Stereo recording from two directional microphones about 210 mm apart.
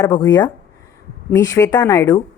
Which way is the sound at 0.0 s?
20° left (ahead or behind).